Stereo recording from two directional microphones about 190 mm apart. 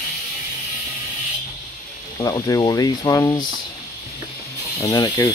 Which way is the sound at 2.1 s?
20° left (ahead or behind).